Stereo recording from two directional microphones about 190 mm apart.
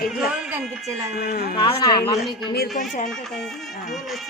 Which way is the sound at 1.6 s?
25° left (ahead or behind).